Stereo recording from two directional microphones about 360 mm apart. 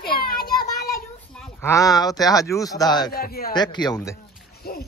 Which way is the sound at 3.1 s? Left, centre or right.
Left.